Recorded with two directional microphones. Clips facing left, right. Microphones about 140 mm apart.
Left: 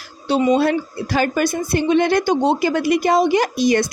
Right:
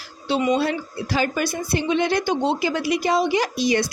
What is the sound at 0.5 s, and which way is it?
A woman's voice, 50° left (ahead or behind).